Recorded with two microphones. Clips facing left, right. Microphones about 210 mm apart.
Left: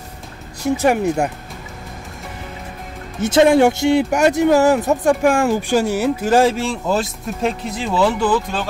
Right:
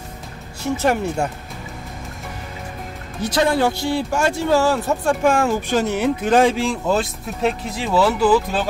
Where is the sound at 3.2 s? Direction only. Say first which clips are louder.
Left 6 dB; 25° left (ahead or behind).